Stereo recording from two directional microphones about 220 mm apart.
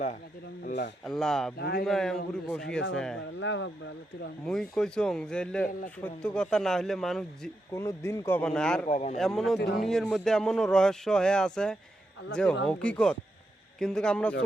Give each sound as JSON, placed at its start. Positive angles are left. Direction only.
{"t": 0.6, "sound": "speech", "side_deg": 40}
{"t": 1.0, "sound": "speech", "side_deg": 0}
{"t": 1.5, "sound": "speech", "side_deg": 50}
{"t": 1.8, "sound": "speech", "side_deg": 0}
{"t": 3.3, "sound": "speech", "side_deg": 55}
{"t": 4.7, "sound": "speech", "side_deg": 5}
{"t": 7.7, "sound": "speech", "side_deg": 15}
{"t": 8.9, "sound": "a man's voice", "side_deg": 30}
{"t": 9.1, "sound": "speech", "side_deg": 0}